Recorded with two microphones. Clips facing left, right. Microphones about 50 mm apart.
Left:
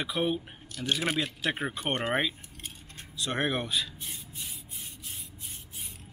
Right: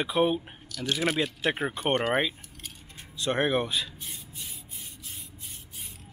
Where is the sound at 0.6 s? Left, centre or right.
Left.